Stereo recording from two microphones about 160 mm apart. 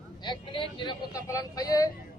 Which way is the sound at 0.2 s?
30° left (ahead or behind).